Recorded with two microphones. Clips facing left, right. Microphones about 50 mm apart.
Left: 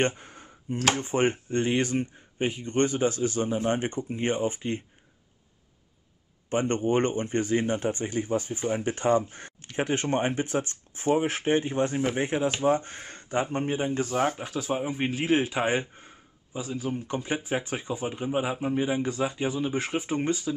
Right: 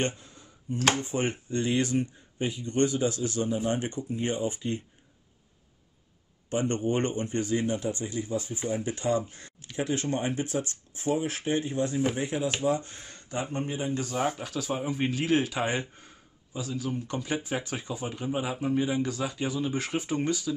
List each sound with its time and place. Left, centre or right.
0.0 s a sound: left
0.9 s speech: left
6.5 s speech: left
14.1 s speech: centre